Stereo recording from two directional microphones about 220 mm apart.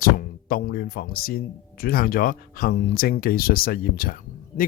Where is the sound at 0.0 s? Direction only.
40° left (ahead or behind).